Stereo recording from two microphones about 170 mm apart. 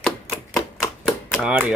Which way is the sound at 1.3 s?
5° right (ahead or behind).